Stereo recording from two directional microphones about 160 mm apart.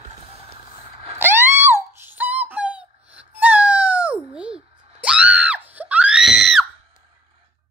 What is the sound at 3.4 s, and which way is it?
Cat, 10° right (ahead or behind).